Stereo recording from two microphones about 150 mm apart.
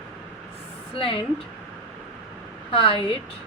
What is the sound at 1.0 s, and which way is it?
Speech, 35° left (ahead or behind).